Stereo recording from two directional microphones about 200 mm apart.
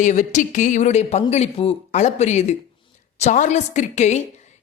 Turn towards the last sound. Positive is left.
turn(degrees=35)  # may be behind; listen again after turning